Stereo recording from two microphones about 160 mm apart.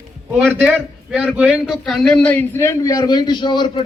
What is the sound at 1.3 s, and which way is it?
A man's voice, 5° right (ahead or behind).